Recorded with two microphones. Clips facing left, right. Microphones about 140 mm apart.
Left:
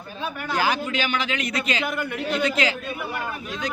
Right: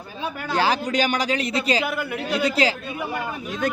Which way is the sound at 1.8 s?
5° right (ahead or behind).